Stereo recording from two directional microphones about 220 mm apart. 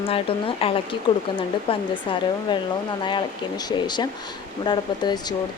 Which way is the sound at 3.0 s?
20° left (ahead or behind).